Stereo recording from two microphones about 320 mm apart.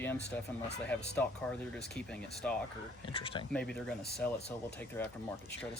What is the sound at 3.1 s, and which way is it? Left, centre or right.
Speech, centre.